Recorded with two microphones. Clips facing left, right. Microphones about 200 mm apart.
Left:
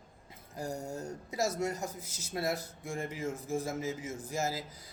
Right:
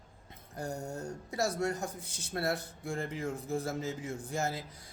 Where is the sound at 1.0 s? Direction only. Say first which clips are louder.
Even; 20° left (ahead or behind).